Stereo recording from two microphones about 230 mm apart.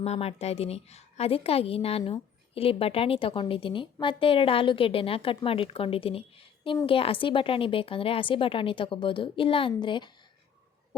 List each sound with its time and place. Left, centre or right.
0.0 s a woman's voice: left